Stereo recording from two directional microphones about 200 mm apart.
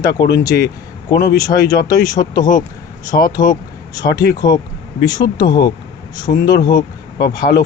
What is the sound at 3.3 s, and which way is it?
Speech, 20° left (ahead or behind).